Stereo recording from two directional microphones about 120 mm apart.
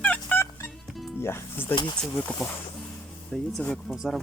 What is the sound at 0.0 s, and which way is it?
Music, 15° left (ahead or behind).